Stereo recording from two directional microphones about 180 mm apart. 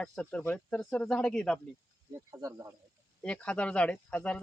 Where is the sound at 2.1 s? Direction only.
20° right (ahead or behind).